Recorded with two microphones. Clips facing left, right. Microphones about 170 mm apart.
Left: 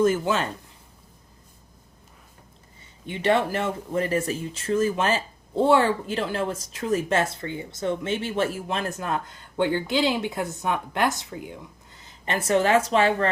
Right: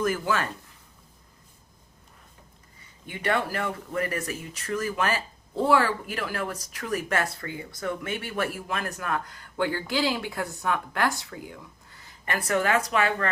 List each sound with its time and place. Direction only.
0.0 s speech: 25° left (ahead or behind)
3.1 s speech: 25° left (ahead or behind)